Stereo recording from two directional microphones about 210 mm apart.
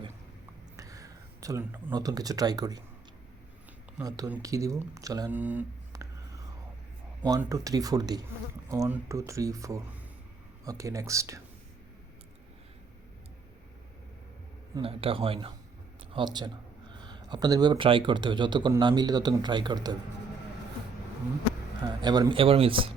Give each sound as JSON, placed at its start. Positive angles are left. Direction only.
{"t": 0.8, "sound": "speech", "side_deg": -15}
{"t": 4.0, "sound": "speech", "side_deg": -15}
{"t": 14.8, "sound": "speech", "side_deg": -25}
{"t": 21.8, "sound": "speech", "side_deg": -20}